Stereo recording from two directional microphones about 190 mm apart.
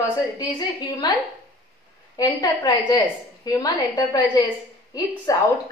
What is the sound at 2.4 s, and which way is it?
A woman's voice, 20° left (ahead or behind).